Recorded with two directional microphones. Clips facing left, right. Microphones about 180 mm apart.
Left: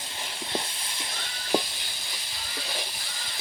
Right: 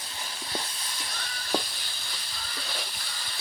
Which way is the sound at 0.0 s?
25° left (ahead or behind).